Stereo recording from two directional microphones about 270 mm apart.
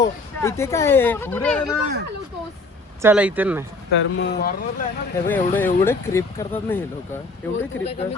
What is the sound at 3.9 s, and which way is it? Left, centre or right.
Speech, left.